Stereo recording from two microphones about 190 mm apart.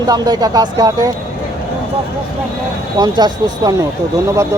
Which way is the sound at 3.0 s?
20° right (ahead or behind).